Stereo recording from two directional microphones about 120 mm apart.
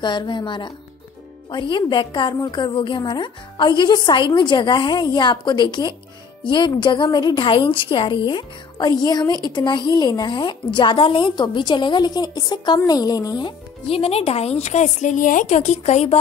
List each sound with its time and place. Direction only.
0.0 s a woman's voice: 40° left (ahead or behind)
13.8 s speech: 55° left (ahead or behind)